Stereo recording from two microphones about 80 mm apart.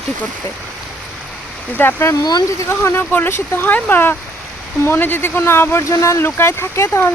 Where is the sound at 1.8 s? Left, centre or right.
Left.